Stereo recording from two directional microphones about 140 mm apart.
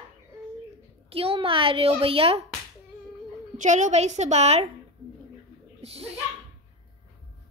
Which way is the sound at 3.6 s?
60° right (ahead or behind).